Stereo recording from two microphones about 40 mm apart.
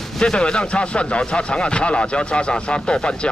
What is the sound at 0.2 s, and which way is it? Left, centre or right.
Speech, left.